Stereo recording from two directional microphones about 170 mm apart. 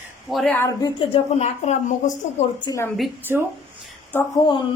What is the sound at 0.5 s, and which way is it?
Speech, 20° left (ahead or behind).